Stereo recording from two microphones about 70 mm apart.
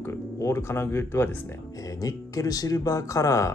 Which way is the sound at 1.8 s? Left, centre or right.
Left.